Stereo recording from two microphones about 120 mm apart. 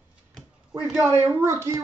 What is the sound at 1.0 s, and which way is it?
Speech, 25° right (ahead or behind).